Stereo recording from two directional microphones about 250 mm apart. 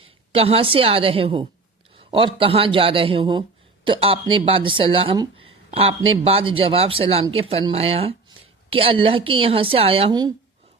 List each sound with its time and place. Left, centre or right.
0.0 s a woman's voice: right